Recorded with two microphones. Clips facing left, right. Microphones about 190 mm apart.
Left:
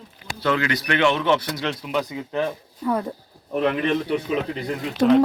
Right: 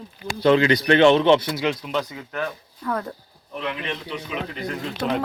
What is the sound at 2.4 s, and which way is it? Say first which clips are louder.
Speech: left 4 dB; 25° left (ahead or behind).